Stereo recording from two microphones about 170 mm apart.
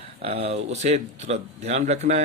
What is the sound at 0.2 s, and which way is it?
Speech, 35° right (ahead or behind).